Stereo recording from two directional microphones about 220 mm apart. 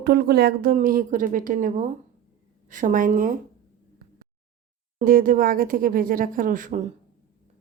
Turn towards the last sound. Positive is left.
turn(degrees=-35)  # may be behind; listen again after turning